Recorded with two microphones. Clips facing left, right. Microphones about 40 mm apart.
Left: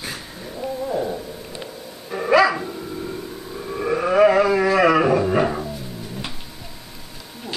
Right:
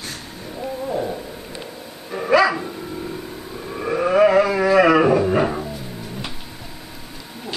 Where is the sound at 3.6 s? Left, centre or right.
Centre.